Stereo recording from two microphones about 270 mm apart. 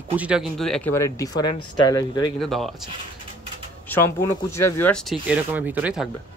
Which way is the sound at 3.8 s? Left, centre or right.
Centre.